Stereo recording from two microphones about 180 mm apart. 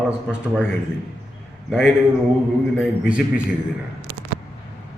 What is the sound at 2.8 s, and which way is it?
Speech, 5° right (ahead or behind).